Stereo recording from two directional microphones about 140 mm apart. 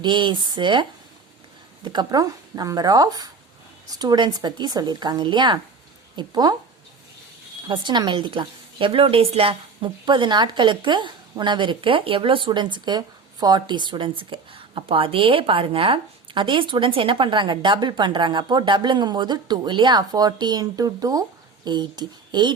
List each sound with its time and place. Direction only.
0.0 s speech: 35° right (ahead or behind)
7.7 s speech: 35° right (ahead or behind)